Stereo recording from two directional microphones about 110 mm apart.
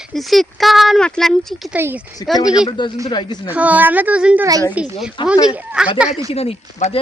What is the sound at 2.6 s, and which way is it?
Speech, 45° left (ahead or behind).